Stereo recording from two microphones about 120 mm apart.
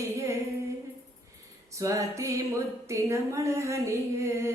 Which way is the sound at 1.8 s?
25° right (ahead or behind).